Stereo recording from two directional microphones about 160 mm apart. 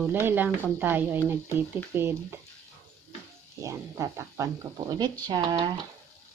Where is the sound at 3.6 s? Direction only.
20° right (ahead or behind).